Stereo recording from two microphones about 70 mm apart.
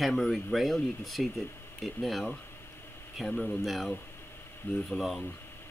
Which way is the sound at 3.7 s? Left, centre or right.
Centre.